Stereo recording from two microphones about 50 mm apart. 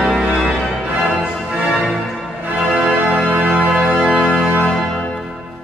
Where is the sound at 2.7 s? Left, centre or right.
Centre.